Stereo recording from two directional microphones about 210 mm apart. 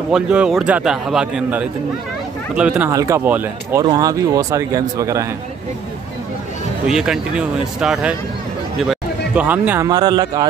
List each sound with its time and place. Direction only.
0.1 s a man's voice: 5° right (ahead or behind)
6.9 s a man's voice: centre (ahead or behind); by 10.4 s 20° right (ahead or behind)